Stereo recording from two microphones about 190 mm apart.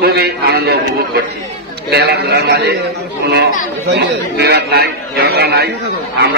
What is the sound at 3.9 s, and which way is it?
A man's voice, 60° right (ahead or behind).